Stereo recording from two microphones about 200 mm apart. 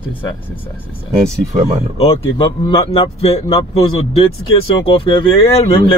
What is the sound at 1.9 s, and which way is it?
Speech, 25° left (ahead or behind).